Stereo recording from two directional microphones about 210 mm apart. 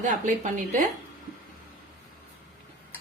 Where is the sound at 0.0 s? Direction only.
35° right (ahead or behind).